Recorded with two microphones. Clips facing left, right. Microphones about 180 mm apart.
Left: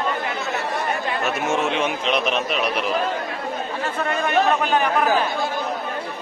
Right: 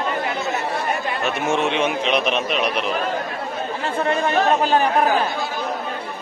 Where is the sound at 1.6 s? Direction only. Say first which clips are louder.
Right 2 dB; centre (ahead or behind).